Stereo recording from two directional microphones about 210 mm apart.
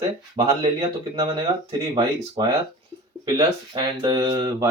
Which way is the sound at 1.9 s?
20° right (ahead or behind).